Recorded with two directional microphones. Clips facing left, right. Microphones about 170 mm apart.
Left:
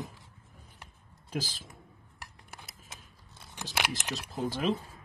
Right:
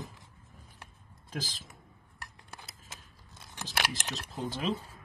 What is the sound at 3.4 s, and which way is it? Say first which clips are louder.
Keys jangling: left 1 dB; 15° left (ahead or behind).